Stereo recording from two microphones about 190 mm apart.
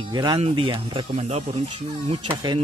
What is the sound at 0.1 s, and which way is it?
Speech, 25° right (ahead or behind).